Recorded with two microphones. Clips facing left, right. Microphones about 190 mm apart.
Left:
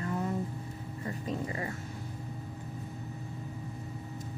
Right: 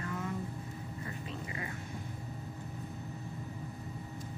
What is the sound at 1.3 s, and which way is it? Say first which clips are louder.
Vehicle: left 7 dB; 40° left (ahead or behind).